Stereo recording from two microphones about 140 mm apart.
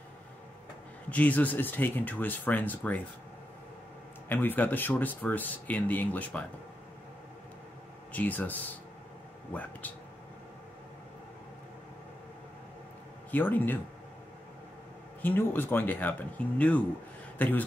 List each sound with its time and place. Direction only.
1.1 s speech: 10° left (ahead or behind)
4.3 s speech: 15° left (ahead or behind)
8.1 s speech: 10° left (ahead or behind)
13.3 s speech: 15° left (ahead or behind)
15.2 s speech: 15° left (ahead or behind)